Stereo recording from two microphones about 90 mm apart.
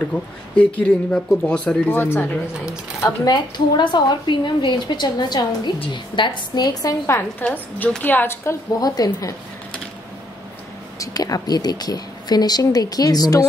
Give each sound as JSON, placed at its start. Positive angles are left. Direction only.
{"t": 0.1, "sound": "speech", "side_deg": 15}
{"t": 3.3, "sound": "a woman's voice", "side_deg": 55}
{"t": 7.1, "sound": "a woman's voice", "side_deg": 25}
{"t": 8.7, "sound": "speech", "side_deg": 45}
{"t": 11.0, "sound": "speech", "side_deg": 45}